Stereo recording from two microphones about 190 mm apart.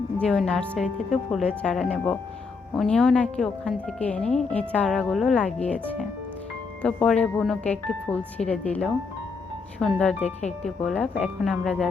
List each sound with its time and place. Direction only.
0.2 s a woman's voice: 5° left (ahead or behind)
10.2 s speech: 35° left (ahead or behind)
10.6 s a woman's voice: 5° left (ahead or behind)